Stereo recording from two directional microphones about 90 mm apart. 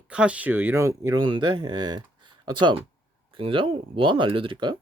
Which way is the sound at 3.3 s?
70° right (ahead or behind).